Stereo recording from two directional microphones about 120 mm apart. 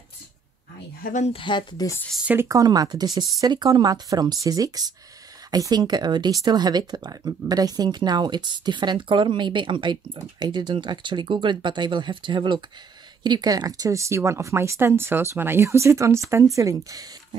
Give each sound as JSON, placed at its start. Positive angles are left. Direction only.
{"t": 1.3, "sound": "speech", "side_deg": 40}
{"t": 2.4, "sound": "speech", "side_deg": -30}